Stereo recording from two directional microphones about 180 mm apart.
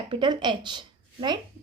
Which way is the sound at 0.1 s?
25° right (ahead or behind).